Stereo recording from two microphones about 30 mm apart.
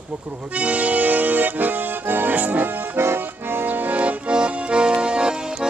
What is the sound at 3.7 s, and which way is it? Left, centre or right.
Music, right.